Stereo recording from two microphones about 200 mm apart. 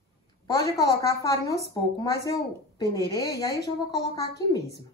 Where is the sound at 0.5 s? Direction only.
15° left (ahead or behind).